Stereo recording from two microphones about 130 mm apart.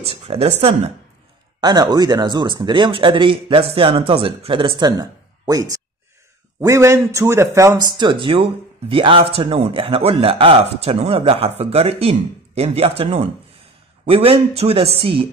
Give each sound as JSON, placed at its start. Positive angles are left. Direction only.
{"t": 0.0, "sound": "a man's voice", "side_deg": -50}
{"t": 1.6, "sound": "a man's voice", "side_deg": -35}